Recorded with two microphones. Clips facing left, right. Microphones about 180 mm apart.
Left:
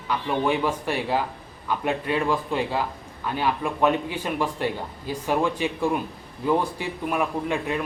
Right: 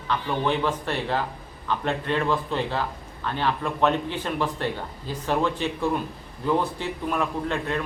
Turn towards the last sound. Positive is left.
turn(degrees=10)  # may be behind; listen again after turning